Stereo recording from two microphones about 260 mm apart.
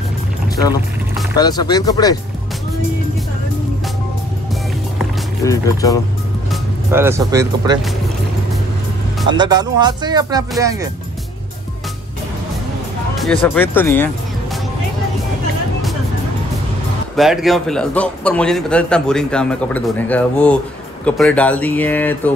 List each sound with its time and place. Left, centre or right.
1.3 s speech: centre
5.4 s speech: centre
6.5 s speech: centre
9.3 s speech: centre
13.2 s speech: centre
17.2 s a man's voice: centre